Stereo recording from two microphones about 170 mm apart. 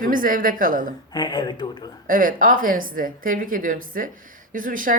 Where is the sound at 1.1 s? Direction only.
25° left (ahead or behind).